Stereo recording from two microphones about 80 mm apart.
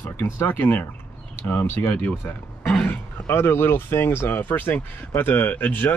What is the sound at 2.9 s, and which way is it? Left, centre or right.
Speech, left.